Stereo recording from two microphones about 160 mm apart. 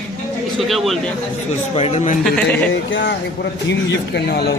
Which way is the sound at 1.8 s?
40° left (ahead or behind).